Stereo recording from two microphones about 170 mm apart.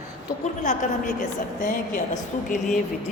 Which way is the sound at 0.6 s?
50° left (ahead or behind).